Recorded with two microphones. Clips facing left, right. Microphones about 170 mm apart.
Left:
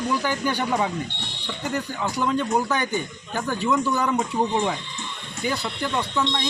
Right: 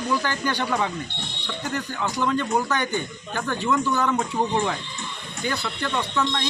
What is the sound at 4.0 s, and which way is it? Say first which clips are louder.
Speech: even; 15° left (ahead or behind).